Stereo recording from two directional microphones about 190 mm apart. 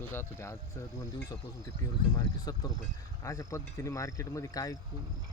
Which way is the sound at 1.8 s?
15° left (ahead or behind).